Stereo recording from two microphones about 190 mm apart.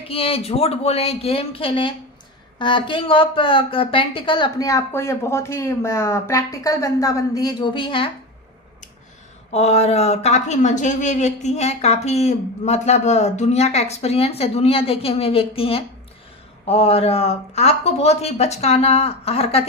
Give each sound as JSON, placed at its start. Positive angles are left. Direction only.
{"t": 0.1, "sound": "speech", "side_deg": 30}
{"t": 9.5, "sound": "speech", "side_deg": 35}